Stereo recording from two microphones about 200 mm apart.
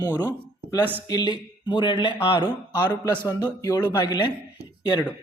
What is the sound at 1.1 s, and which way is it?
Speech, 20° left (ahead or behind).